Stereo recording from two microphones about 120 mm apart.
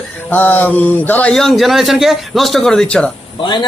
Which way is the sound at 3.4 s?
40° left (ahead or behind).